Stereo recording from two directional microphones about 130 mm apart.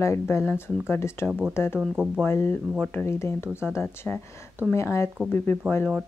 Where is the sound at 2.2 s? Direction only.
20° left (ahead or behind).